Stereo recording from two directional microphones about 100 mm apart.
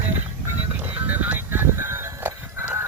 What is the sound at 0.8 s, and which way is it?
Music, 15° right (ahead or behind).